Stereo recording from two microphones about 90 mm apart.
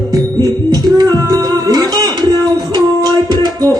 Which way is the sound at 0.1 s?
45° right (ahead or behind).